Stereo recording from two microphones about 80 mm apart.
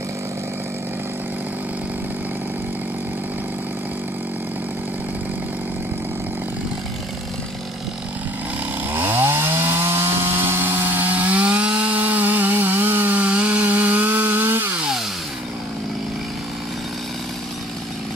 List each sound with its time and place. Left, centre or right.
8.9 s chainsaw: right